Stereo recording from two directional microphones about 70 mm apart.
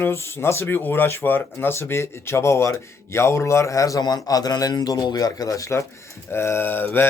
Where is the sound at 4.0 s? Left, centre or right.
Left.